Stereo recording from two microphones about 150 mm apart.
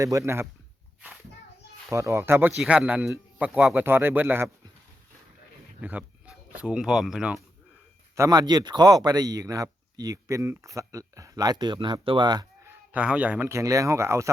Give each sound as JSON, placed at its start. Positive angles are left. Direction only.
{"t": 0.0, "sound": "speech", "side_deg": -20}
{"t": 1.9, "sound": "speech", "side_deg": -20}
{"t": 5.8, "sound": "speech", "side_deg": -10}
{"t": 8.1, "sound": "speech", "side_deg": -25}
{"t": 12.6, "sound": "speech", "side_deg": -10}